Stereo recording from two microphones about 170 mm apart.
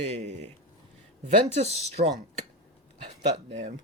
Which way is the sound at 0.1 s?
40° right (ahead or behind).